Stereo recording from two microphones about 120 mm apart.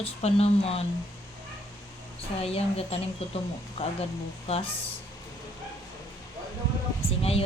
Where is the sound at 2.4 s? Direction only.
55° left (ahead or behind).